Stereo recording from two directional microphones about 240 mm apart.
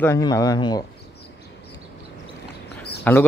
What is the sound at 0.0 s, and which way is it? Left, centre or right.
Speech, centre.